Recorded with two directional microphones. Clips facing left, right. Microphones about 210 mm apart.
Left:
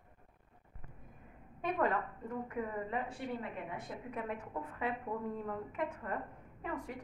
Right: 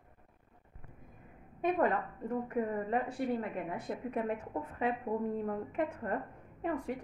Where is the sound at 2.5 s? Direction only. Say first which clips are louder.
Right 6 dB; 40° right (ahead or behind).